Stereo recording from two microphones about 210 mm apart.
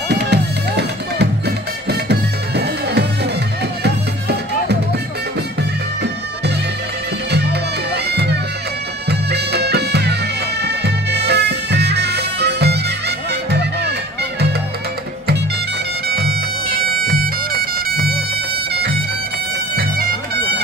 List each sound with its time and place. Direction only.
0.1 s music: 55° right (ahead or behind)
7.9 s music: 50° right (ahead or behind)
16.1 s music: 50° right (ahead or behind)
20.0 s bagpipes: 50° right (ahead or behind)